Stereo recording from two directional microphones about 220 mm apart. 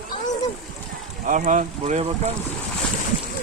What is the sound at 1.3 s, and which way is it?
Speech, 35° right (ahead or behind).